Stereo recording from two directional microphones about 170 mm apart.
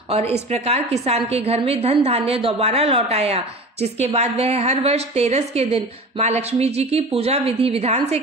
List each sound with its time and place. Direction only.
0.5 s a woman's voice: 40° right (ahead or behind)